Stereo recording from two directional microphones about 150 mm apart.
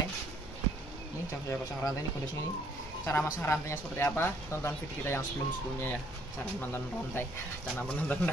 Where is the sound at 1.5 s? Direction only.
20° left (ahead or behind).